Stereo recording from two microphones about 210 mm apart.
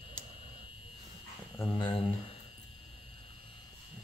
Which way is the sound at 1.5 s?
10° left (ahead or behind).